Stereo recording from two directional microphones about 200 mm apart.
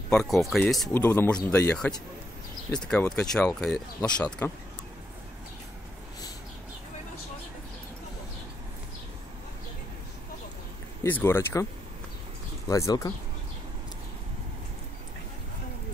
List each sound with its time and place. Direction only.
0.1 s speech: centre (ahead or behind)
11.0 s speech: 10° left (ahead or behind)
12.6 s speech: 15° left (ahead or behind)